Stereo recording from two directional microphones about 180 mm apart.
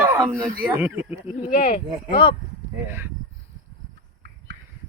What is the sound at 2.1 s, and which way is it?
Speech, 25° left (ahead or behind).